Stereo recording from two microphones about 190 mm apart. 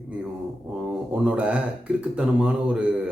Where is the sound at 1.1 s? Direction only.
5° right (ahead or behind).